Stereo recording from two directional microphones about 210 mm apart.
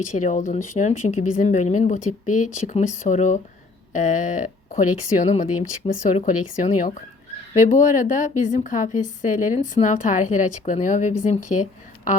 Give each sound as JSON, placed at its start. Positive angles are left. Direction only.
{"t": 0.0, "sound": "a woman's voice", "side_deg": 35}